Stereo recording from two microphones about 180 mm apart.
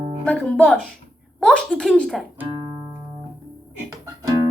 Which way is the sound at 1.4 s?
5° left (ahead or behind).